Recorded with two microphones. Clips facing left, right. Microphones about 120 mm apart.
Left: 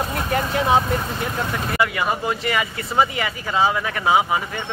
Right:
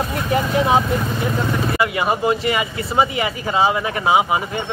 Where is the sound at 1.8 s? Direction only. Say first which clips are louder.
Right 1 dB; 20° right (ahead or behind).